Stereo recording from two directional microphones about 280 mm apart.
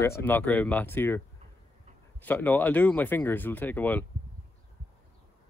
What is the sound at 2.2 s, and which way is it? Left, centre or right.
Speech, centre.